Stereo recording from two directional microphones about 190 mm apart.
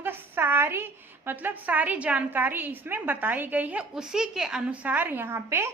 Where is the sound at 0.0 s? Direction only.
10° right (ahead or behind).